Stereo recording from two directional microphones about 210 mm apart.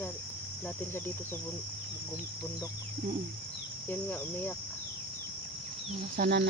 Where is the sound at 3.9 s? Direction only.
10° left (ahead or behind).